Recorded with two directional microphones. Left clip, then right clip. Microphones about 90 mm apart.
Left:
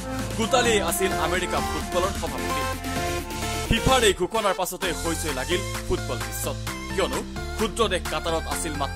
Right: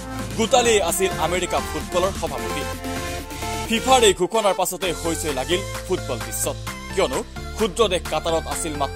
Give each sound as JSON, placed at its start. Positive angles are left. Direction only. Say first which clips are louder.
{"t": 0.4, "sound": "speech", "louder": "right 4 dB", "side_deg": -35}
{"t": 3.7, "sound": "speech", "louder": "right 4 dB", "side_deg": -35}
{"t": 7.1, "sound": "speech", "louder": "right 3 dB", "side_deg": 0}
{"t": 7.6, "sound": "speech", "louder": "right 4 dB", "side_deg": -30}